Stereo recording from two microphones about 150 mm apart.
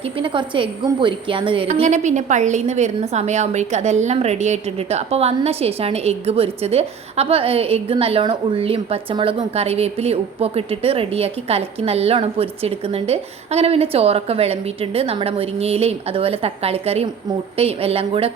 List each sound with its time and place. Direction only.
0.2 s a woman's voice: 35° right (ahead or behind)